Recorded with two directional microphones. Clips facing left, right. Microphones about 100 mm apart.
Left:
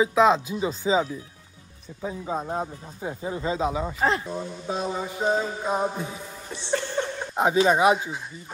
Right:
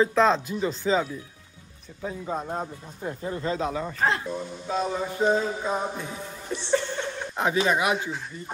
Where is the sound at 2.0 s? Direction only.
10° left (ahead or behind).